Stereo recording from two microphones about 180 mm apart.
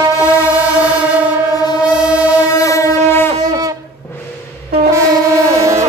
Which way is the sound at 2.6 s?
15° left (ahead or behind).